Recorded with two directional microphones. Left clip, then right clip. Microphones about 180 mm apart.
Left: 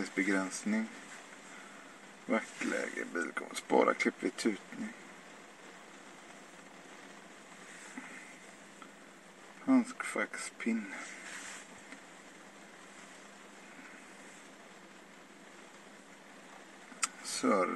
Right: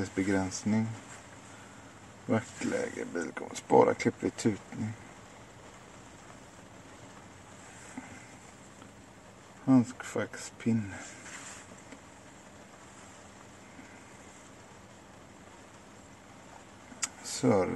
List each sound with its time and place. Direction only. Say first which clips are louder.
0.0 s speech: right 2 dB; 25° right (ahead or behind)
2.2 s speech: right 2 dB; 25° right (ahead or behind)
9.7 s speech: right 3 dB; 20° right (ahead or behind)
17.4 s speech: right 3 dB; 25° right (ahead or behind)